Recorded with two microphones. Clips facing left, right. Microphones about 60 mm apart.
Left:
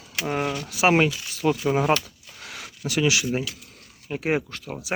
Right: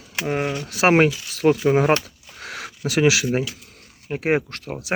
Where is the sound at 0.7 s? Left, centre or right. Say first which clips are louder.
Right 4 dB; right.